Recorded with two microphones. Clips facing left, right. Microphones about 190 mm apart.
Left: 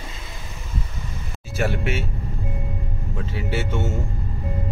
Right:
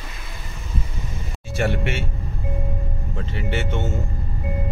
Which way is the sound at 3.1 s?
5° left (ahead or behind).